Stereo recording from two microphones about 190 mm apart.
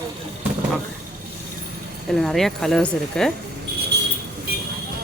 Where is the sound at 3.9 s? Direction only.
60° right (ahead or behind).